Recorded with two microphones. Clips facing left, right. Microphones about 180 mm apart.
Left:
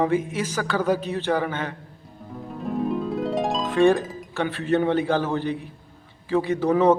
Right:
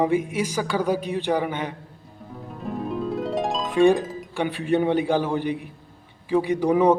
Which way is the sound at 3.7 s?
15° right (ahead or behind).